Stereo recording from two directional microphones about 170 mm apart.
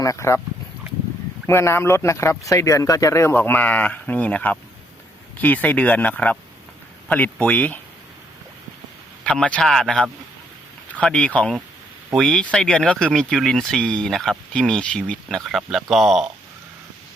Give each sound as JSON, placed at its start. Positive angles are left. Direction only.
{"t": 0.0, "sound": "speech", "side_deg": 15}
{"t": 1.5, "sound": "speech", "side_deg": 15}
{"t": 9.2, "sound": "speech", "side_deg": 5}